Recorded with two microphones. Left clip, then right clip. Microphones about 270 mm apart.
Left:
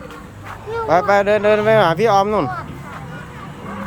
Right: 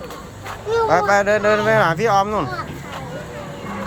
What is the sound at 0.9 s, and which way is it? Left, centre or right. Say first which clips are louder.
Speech: left 3 dB; centre.